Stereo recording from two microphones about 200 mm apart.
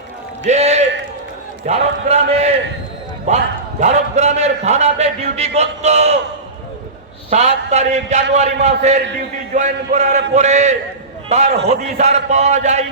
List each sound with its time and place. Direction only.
0.4 s a sound: 35° right (ahead or behind)
1.6 s a man's voice: 35° right (ahead or behind)
3.8 s a man's voice: 35° right (ahead or behind)
7.3 s a man's voice: 35° right (ahead or behind)